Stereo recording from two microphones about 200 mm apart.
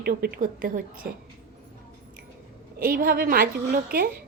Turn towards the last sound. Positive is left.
turn(degrees=-45)  # may be behind; listen again after turning